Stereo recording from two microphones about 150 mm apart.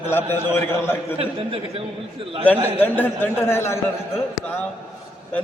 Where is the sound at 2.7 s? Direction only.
10° left (ahead or behind).